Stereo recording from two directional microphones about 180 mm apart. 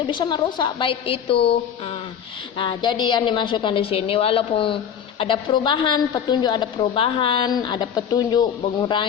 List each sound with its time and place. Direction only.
0.0 s a woman's voice: 25° left (ahead or behind)